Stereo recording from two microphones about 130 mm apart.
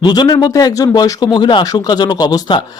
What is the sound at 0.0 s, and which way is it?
Speech, 35° left (ahead or behind).